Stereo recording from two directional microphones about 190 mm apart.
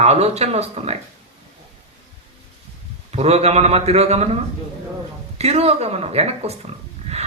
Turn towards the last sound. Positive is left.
turn(degrees=-35)  # may be behind; listen again after turning